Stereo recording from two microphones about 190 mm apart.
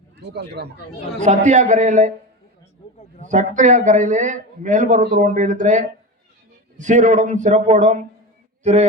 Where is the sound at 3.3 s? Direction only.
40° right (ahead or behind).